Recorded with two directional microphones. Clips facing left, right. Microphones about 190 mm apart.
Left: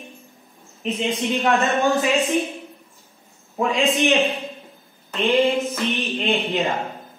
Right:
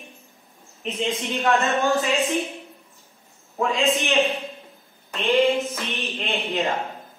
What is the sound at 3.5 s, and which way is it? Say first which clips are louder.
Speech: left 2 dB; 15° left (ahead or behind).